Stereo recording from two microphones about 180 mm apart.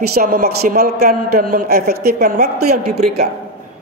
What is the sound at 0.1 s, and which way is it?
Speech, 60° right (ahead or behind).